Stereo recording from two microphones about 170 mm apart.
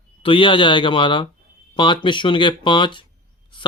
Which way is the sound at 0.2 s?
30° left (ahead or behind).